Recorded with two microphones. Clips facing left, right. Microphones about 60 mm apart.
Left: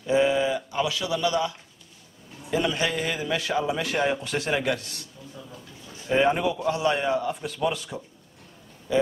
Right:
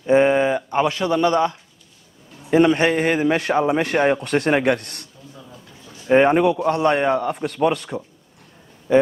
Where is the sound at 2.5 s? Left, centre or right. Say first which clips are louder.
Right 10 dB; right.